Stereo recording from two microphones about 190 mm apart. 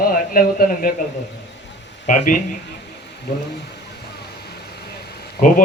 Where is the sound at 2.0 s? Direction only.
45° left (ahead or behind).